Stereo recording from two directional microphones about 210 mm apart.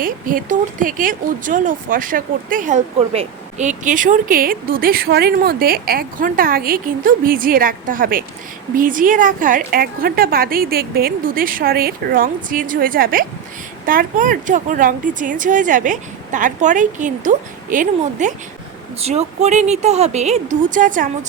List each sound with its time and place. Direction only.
0.0 s a woman's voice: 40° right (ahead or behind)